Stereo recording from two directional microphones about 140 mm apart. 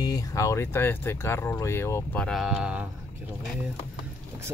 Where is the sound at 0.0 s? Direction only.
25° left (ahead or behind).